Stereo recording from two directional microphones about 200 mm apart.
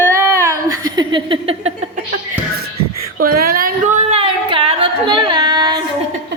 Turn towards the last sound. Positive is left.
turn(degrees=-20)  # may be behind; listen again after turning